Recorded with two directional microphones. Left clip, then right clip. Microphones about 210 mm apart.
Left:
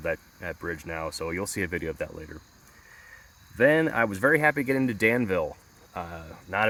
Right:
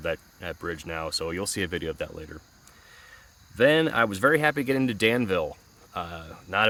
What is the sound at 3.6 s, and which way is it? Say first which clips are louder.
Speech: right 1 dB; 15° right (ahead or behind).